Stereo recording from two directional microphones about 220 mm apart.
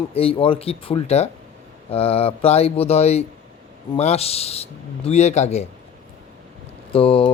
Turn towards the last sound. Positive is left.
turn(degrees=25)  # may be behind; listen again after turning